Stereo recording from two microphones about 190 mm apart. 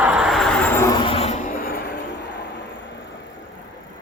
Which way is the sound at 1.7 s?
55° left (ahead or behind).